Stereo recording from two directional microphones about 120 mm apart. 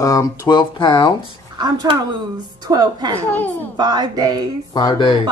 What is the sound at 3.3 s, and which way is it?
Speech, 15° left (ahead or behind).